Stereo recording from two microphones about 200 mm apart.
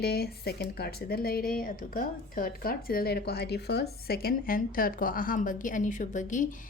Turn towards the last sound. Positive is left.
turn(degrees=40)  # may be behind; listen again after turning